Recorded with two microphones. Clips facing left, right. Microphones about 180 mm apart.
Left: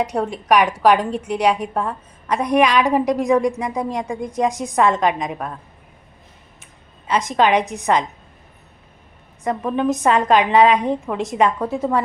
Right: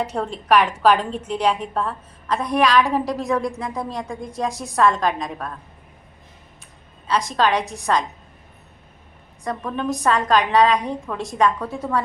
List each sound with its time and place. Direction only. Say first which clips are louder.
0.0 s a woman's voice: left 3 dB; 10° left (ahead or behind)
7.1 s a woman's voice: left 3 dB; 20° left (ahead or behind)
9.4 s a woman's voice: left 5 dB; 20° left (ahead or behind)